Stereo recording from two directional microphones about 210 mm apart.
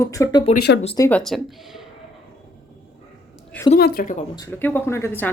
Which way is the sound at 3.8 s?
45° left (ahead or behind).